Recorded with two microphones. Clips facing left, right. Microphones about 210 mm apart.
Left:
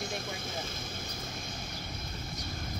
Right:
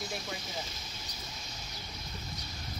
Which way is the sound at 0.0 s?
50° left (ahead or behind).